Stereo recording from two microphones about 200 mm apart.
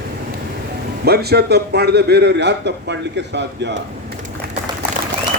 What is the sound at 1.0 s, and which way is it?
A man's voice, 55° right (ahead or behind).